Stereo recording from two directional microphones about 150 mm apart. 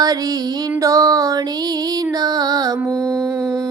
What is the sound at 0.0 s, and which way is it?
Female singing, 25° right (ahead or behind).